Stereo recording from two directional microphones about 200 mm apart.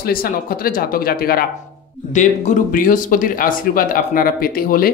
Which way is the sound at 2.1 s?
40° left (ahead or behind).